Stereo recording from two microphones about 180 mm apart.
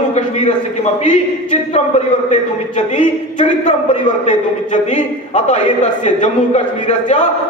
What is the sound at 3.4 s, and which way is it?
A man's voice, 40° left (ahead or behind).